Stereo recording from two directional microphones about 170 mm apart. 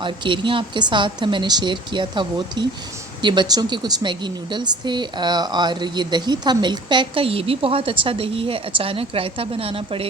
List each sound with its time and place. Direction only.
0.0 s speech: 30° right (ahead or behind)